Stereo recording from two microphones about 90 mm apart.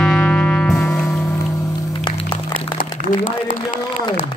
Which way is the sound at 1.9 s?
55° left (ahead or behind).